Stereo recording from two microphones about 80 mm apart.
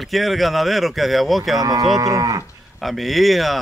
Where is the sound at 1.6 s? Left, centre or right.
Right.